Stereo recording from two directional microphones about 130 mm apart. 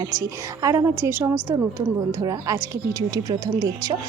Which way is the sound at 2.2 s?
30° right (ahead or behind).